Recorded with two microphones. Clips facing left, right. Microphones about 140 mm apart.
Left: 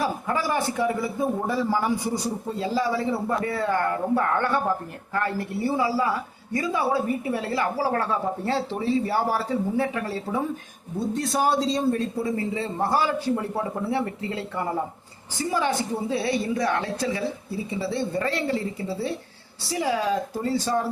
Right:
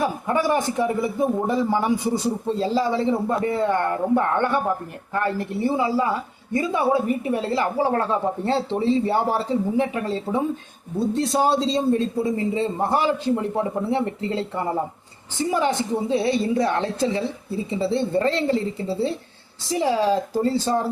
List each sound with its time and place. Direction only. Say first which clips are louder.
0.0 s a woman's voice: right 4 dB; 25° right (ahead or behind)